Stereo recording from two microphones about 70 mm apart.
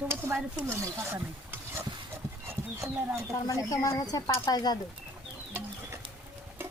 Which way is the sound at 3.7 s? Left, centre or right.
Left.